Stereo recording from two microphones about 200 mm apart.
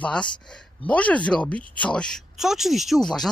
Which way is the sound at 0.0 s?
5° left (ahead or behind).